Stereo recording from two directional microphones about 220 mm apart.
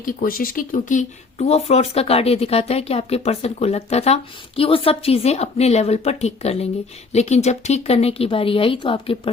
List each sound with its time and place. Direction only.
0.0 s speech: 40° left (ahead or behind); by 9.3 s 25° left (ahead or behind)